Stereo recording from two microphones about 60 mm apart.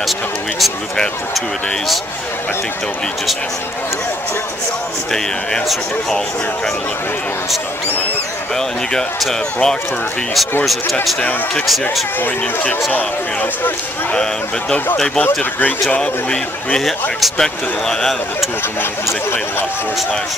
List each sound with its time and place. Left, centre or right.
5.7 s speech: centre
8.5 s speech: centre
12.9 s speech: left
16.0 s speech: centre
18.8 s speech: left